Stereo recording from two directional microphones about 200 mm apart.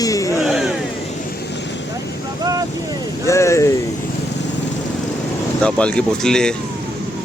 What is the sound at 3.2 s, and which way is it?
Speech, 15° left (ahead or behind).